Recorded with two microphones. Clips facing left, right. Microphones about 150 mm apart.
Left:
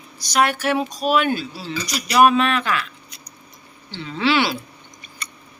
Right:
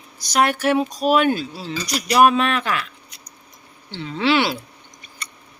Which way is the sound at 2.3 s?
45° right (ahead or behind).